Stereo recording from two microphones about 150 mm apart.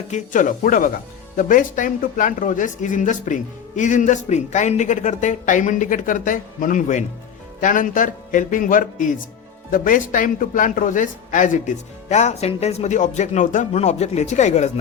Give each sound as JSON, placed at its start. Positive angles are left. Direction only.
{"t": 0.1, "sound": "speech", "side_deg": 60}